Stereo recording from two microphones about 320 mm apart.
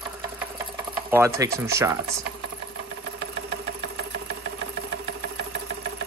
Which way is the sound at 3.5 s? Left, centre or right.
Right.